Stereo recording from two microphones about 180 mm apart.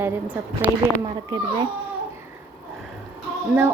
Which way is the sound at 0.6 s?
25° right (ahead or behind).